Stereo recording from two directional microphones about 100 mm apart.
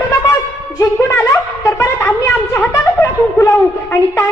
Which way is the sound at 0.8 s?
30° left (ahead or behind).